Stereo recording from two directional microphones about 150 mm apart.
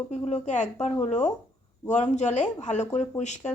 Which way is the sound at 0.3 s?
50° left (ahead or behind).